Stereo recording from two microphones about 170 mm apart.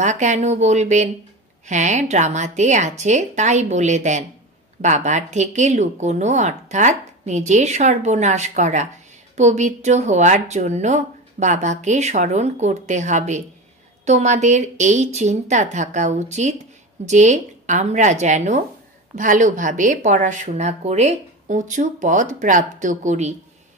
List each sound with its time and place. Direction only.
0.0 s speech: 45° right (ahead or behind)